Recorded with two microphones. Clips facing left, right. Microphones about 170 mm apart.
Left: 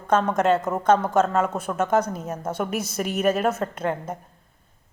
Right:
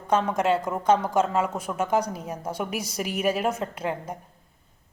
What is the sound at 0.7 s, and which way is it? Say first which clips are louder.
Speech: left 3 dB; 40° left (ahead or behind).